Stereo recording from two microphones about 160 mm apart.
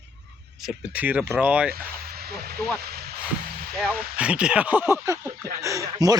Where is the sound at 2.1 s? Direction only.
75° right (ahead or behind).